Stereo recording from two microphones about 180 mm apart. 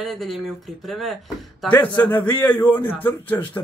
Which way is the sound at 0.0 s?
Centre (ahead or behind).